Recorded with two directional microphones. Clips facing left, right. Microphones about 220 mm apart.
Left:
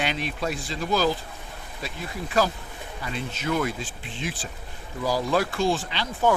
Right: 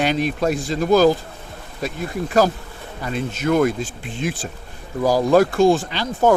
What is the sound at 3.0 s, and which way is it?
Speech, 50° right (ahead or behind).